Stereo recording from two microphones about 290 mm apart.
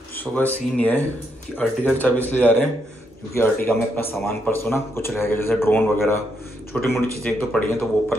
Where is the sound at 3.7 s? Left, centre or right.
Centre.